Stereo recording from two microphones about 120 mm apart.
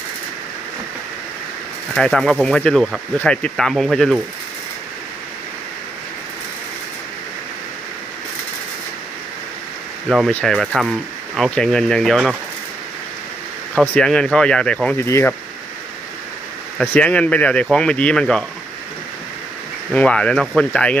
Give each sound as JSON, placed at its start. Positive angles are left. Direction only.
{"t": 2.0, "sound": "speech", "side_deg": 5}
{"t": 10.1, "sound": "speech", "side_deg": 0}
{"t": 13.8, "sound": "speech", "side_deg": 15}
{"t": 14.1, "sound": "speech", "side_deg": 5}
{"t": 14.9, "sound": "speech", "side_deg": 20}
{"t": 16.9, "sound": "speech", "side_deg": 10}
{"t": 19.9, "sound": "speech", "side_deg": 10}